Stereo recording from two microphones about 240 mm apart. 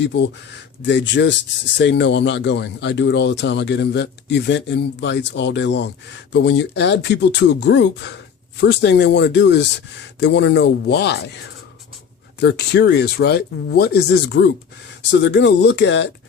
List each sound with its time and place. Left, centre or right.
0.0 s speech: left
12.4 s speech: left